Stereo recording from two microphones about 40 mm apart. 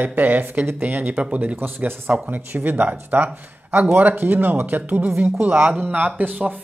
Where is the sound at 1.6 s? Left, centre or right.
Right.